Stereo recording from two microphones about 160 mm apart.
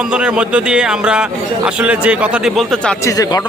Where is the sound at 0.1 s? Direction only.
5° right (ahead or behind).